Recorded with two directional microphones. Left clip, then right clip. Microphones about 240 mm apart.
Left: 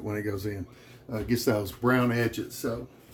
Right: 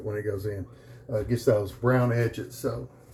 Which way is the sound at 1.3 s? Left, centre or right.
Left.